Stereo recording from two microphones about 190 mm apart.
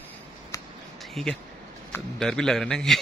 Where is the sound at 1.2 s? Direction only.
Centre (ahead or behind).